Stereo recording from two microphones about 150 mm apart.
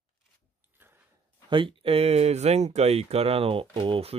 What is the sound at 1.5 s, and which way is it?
Speech, 35° right (ahead or behind).